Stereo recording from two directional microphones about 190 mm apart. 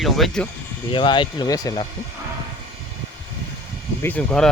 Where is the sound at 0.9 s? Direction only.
25° left (ahead or behind).